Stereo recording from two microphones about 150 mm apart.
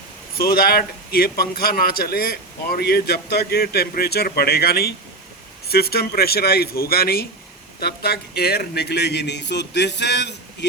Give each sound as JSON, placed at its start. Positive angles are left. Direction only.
{"t": 0.3, "sound": "a man's voice", "side_deg": 85}